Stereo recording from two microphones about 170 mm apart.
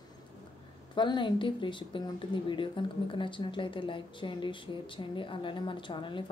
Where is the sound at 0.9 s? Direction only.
25° left (ahead or behind).